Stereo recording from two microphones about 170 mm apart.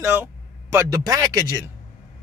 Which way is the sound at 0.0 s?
15° right (ahead or behind).